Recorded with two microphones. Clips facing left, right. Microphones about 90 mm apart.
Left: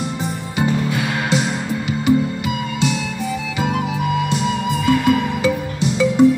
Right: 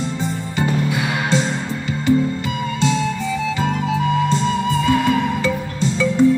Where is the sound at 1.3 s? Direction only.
15° left (ahead or behind).